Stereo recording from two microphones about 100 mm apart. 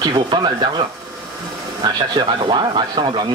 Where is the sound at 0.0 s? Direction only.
45° right (ahead or behind).